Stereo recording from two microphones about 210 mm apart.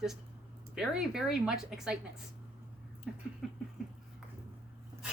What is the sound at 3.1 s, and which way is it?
Speech, 5° right (ahead or behind).